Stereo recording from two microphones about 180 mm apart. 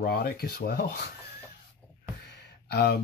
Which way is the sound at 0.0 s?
60° left (ahead or behind).